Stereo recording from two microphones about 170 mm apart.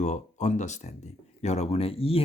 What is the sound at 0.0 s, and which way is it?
Speech, 45° left (ahead or behind).